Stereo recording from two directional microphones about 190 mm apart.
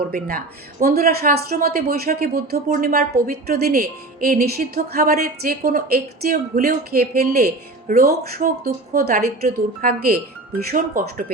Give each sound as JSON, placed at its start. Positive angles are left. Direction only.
{"t": 0.1, "sound": "speech", "side_deg": -50}